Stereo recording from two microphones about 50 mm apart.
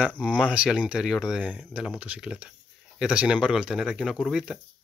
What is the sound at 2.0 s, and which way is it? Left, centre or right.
Speech, right.